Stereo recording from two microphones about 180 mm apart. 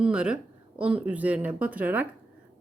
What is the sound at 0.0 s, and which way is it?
A woman's voice, 5° right (ahead or behind).